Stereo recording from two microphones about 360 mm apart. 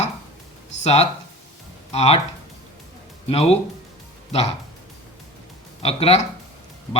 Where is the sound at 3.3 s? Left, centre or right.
Centre.